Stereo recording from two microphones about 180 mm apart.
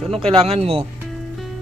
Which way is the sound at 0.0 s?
Centre (ahead or behind).